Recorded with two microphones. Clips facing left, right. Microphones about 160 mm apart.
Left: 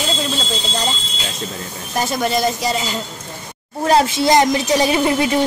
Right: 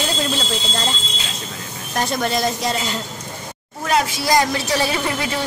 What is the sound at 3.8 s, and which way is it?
A woman's voice, 25° left (ahead or behind).